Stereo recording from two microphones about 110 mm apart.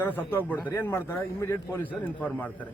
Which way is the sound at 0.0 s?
15° left (ahead or behind).